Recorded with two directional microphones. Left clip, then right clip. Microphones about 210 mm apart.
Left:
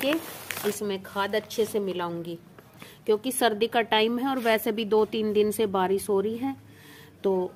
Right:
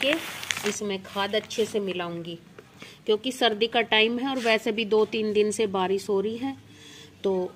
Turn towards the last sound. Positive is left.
turn(degrees=0)  # may be behind; listen again after turning